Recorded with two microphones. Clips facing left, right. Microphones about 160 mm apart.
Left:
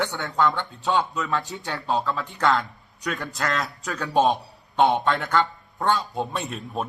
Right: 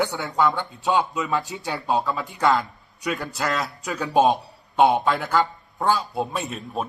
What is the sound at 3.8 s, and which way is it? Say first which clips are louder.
A man's voice: right 2 dB; 10° right (ahead or behind).